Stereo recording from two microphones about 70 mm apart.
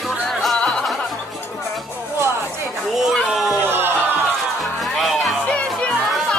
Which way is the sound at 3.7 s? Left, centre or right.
Right.